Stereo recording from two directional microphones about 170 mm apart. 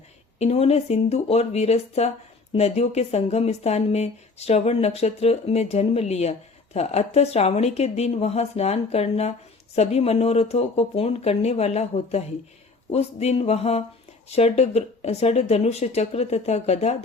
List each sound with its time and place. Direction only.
0.3 s speech: 40° left (ahead or behind)